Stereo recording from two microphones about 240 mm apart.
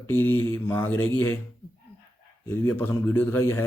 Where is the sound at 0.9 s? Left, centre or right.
Left.